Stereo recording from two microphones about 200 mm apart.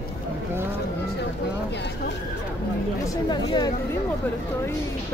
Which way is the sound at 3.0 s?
20° left (ahead or behind).